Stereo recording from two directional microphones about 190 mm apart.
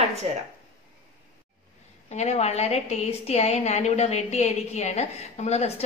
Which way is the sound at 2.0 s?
35° left (ahead or behind).